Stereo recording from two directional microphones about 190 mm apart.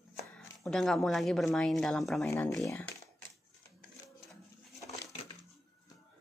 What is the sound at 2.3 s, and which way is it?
Speech, 15° left (ahead or behind).